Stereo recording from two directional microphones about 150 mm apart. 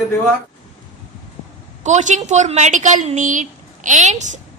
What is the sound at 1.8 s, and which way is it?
A woman's voice, 55° right (ahead or behind).